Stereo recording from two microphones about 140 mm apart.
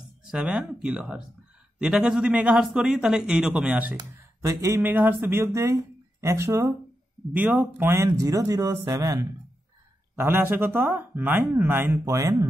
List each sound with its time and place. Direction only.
0.2 s a man's voice: 5° right (ahead or behind)
4.4 s speech: 20° right (ahead or behind)